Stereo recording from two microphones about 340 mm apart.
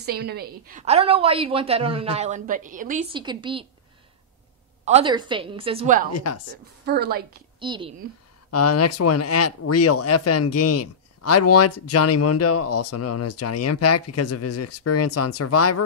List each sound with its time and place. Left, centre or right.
0.0 s a woman's voice: right
4.8 s a woman's voice: centre
6.1 s speech: left
6.9 s a woman's voice: right
7.6 s a woman's voice: centre
8.5 s speech: left